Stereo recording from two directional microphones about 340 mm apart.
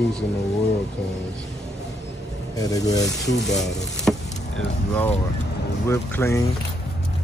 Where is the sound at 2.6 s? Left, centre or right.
Centre.